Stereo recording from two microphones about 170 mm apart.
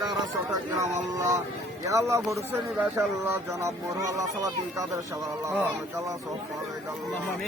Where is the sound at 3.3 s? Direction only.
20° right (ahead or behind).